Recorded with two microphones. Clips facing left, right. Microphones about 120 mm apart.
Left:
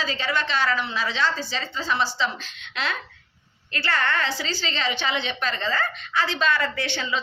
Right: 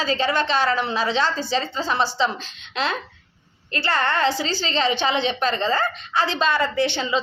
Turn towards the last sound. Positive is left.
turn(degrees=-20)  # may be behind; listen again after turning